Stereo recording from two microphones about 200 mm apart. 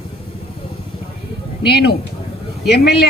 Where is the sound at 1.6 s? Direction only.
55° left (ahead or behind).